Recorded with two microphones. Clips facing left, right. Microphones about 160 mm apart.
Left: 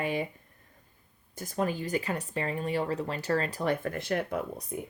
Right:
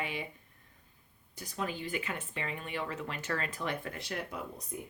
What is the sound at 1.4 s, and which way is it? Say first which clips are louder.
Speech: left 7 dB; 45° left (ahead or behind).